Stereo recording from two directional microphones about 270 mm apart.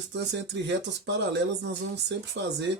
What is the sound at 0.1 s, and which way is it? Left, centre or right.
Speech, right.